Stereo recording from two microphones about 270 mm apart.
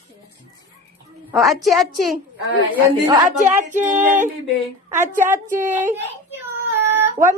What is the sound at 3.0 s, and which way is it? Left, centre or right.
Speech, centre.